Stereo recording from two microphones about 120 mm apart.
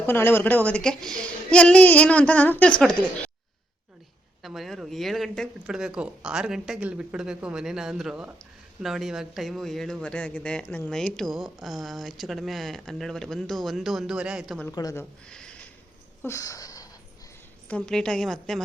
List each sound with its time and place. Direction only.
0.0 s a woman's voice: 15° left (ahead or behind)
4.4 s speech: centre (ahead or behind)
14.7 s a woman's voice: 30° left (ahead or behind)
15.3 s a sound: 5° left (ahead or behind)
16.2 s a sound: 25° left (ahead or behind)
17.7 s speech: 10° left (ahead or behind)